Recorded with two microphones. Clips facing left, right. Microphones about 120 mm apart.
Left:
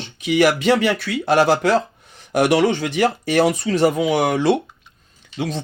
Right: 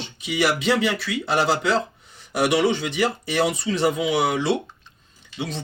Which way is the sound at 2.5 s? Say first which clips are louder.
Left 4 dB; 50° left (ahead or behind).